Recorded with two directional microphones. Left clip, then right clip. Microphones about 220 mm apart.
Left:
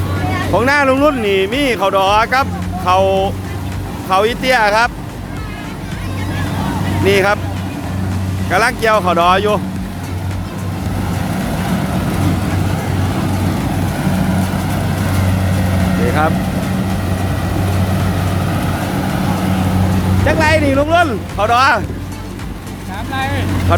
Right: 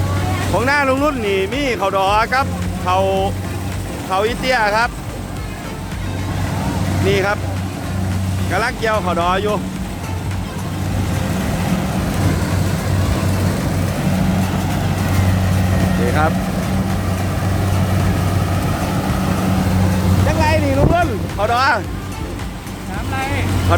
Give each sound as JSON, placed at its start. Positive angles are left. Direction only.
{"t": 0.5, "sound": "speech", "side_deg": 15}
{"t": 7.0, "sound": "speech", "side_deg": 25}
{"t": 8.4, "sound": "speech", "side_deg": 25}
{"t": 16.0, "sound": "vehicle", "side_deg": 5}
{"t": 18.6, "sound": "vehicle", "side_deg": 0}
{"t": 20.2, "sound": "speech", "side_deg": 20}